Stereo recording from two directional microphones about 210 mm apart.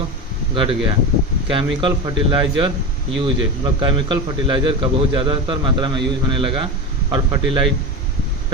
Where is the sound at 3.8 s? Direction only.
25° right (ahead or behind).